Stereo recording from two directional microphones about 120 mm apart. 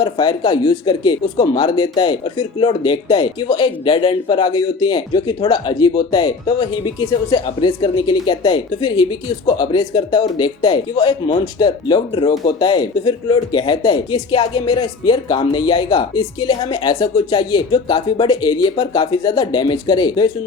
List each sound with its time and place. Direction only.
0.0 s a man's voice: 40° left (ahead or behind)